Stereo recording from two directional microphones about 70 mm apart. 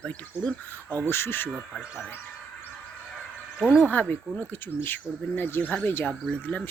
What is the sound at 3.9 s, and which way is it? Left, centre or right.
Speech, left.